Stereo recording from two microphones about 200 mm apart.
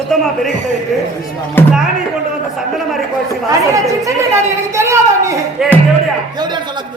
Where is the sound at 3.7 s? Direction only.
15° right (ahead or behind).